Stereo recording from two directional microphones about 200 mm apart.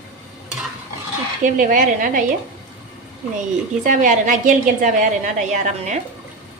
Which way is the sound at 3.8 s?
40° right (ahead or behind).